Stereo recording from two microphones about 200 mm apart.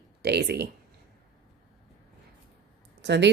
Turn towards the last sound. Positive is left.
turn(degrees=-60)  # may be behind; listen again after turning